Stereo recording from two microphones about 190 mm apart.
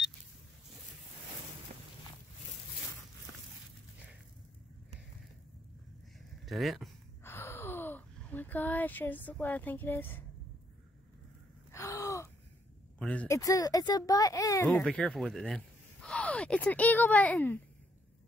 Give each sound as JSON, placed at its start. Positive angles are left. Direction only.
{"t": 6.4, "sound": "speech", "side_deg": 0}
{"t": 7.2, "sound": "gasp", "side_deg": 15}
{"t": 11.7, "sound": "gasp", "side_deg": 15}
{"t": 13.0, "sound": "speech", "side_deg": 5}
{"t": 13.4, "sound": "speech", "side_deg": 20}
{"t": 14.7, "sound": "speech", "side_deg": 5}